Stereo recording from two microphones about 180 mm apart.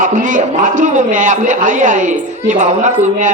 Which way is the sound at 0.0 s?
45° right (ahead or behind).